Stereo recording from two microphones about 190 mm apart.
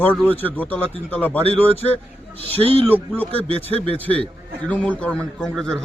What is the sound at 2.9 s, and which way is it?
Speech, 10° left (ahead or behind).